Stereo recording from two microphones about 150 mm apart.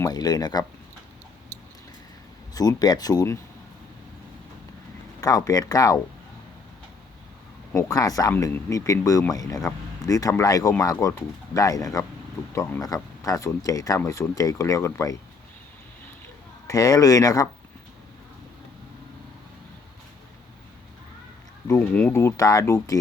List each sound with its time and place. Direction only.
0.0 s speech: 25° left (ahead or behind)
2.6 s speech: 25° left (ahead or behind)
5.2 s speech: 25° left (ahead or behind)
7.8 s speech: 20° left (ahead or behind)
16.6 s speech: 25° left (ahead or behind)
21.8 s speech: 10° left (ahead or behind)
22.1 s speech: 20° left (ahead or behind)